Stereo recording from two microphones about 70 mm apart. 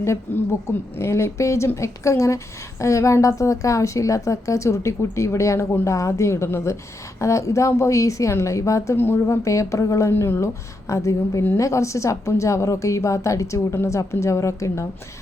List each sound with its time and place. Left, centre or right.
0.3 s a woman's voice: left
9.0 s a woman's voice: left